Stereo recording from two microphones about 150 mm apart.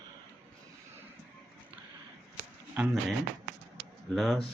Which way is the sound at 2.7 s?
5° right (ahead or behind).